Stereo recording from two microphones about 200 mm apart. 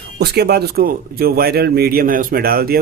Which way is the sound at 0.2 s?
55° right (ahead or behind).